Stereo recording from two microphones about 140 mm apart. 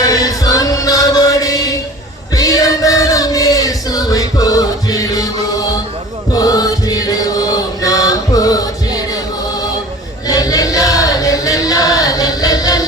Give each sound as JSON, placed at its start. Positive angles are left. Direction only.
{"t": 0.0, "sound": "chant", "side_deg": 25}
{"t": 2.3, "sound": "choir", "side_deg": 25}
{"t": 6.3, "sound": "chant", "side_deg": 25}
{"t": 10.2, "sound": "chant", "side_deg": 25}